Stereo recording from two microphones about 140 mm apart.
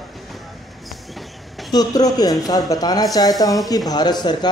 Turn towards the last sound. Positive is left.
turn(degrees=30)  # may be behind; listen again after turning